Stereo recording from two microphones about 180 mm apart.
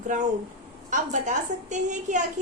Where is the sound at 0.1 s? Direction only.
45° right (ahead or behind).